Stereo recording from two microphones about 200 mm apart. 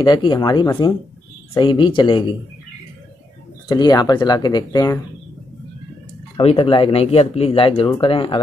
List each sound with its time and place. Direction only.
0.0 s speech: 20° left (ahead or behind)
3.6 s speech: 20° left (ahead or behind)
6.3 s speech: 30° left (ahead or behind)